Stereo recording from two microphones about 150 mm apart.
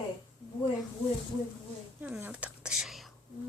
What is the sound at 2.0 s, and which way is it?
Speech, 10° right (ahead or behind).